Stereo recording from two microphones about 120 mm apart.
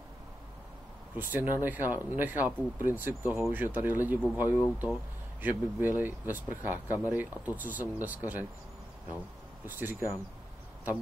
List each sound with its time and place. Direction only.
1.1 s speech: 15° right (ahead or behind)
9.7 s speech: 15° right (ahead or behind)